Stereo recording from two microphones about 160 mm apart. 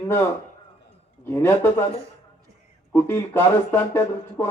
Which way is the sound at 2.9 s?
15° left (ahead or behind).